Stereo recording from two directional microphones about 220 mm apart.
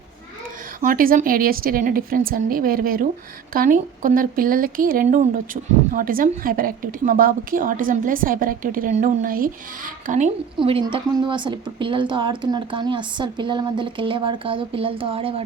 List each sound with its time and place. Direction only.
0.8 s a woman's voice: 40° right (ahead or behind)
10.6 s a woman's voice: 25° right (ahead or behind)